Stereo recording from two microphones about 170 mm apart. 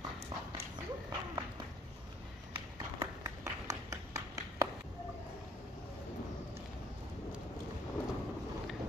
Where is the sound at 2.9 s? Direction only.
20° right (ahead or behind).